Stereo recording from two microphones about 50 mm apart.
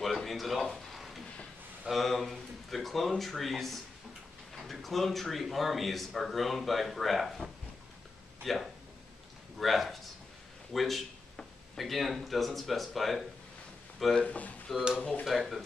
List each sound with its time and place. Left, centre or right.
0.0 s a sound: centre
1.9 s speech: centre
14.1 s speech: left
14.7 s speech: centre